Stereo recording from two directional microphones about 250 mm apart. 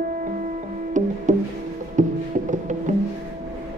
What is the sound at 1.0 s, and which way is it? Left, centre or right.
Music, right.